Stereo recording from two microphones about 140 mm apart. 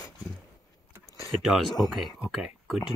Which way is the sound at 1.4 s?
Centre (ahead or behind).